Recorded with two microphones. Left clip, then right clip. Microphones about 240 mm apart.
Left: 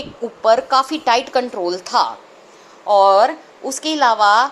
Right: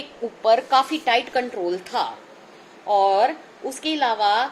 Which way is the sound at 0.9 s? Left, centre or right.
Centre.